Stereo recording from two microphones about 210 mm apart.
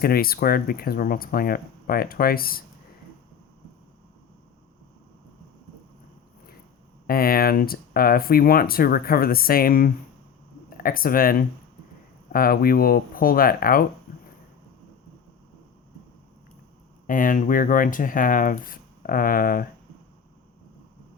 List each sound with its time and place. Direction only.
0.0 s speech: 45° left (ahead or behind)
7.1 s speech: 45° left (ahead or behind)
14.1 s a sound: 40° left (ahead or behind)
17.1 s speech: 40° left (ahead or behind)